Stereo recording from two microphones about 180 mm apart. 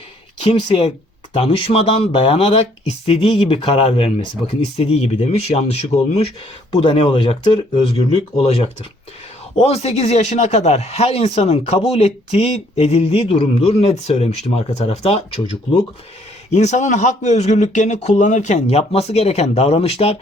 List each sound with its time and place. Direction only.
0.4 s speech: 35° left (ahead or behind)